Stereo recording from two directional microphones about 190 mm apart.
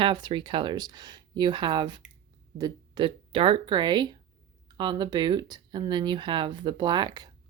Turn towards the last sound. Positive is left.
turn(degrees=-20)  # may be behind; listen again after turning